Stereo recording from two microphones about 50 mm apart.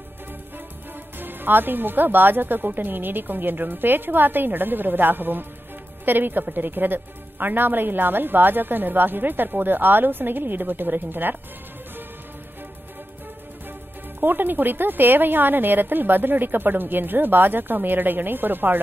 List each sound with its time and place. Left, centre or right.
1.2 s a woman's voice: right
14.2 s a woman's voice: right